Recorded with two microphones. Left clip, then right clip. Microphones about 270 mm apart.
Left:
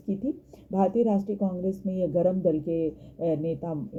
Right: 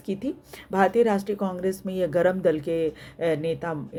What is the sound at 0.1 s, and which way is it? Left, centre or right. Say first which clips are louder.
Speech: right 1 dB; right.